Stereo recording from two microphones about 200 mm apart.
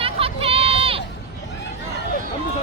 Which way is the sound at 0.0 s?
30° right (ahead or behind).